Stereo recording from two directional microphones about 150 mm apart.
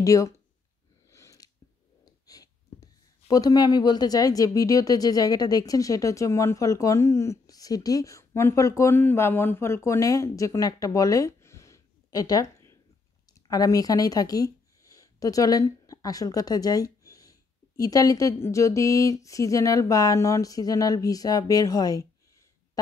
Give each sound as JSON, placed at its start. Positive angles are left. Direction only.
{"t": 0.0, "sound": "speech", "side_deg": 20}
{"t": 1.1, "sound": "a sound", "side_deg": 20}
{"t": 2.0, "sound": "speech", "side_deg": 25}